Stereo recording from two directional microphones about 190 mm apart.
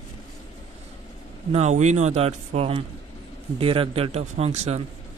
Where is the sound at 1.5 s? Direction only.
35° right (ahead or behind).